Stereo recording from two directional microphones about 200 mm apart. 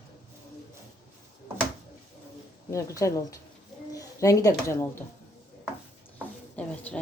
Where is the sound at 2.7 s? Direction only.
15° left (ahead or behind).